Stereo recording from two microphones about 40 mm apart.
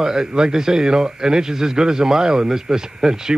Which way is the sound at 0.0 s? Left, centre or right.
Centre.